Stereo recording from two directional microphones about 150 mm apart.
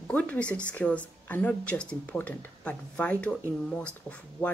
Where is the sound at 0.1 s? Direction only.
10° left (ahead or behind).